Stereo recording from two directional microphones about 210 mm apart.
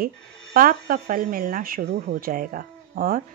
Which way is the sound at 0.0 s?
45° right (ahead or behind).